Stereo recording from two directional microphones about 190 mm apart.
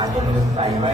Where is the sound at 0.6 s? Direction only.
30° right (ahead or behind).